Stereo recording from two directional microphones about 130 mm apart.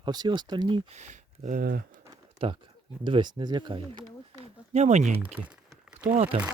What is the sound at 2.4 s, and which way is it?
Speech, 45° right (ahead or behind).